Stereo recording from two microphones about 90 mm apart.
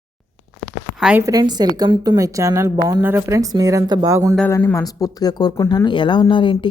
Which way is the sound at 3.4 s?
40° right (ahead or behind).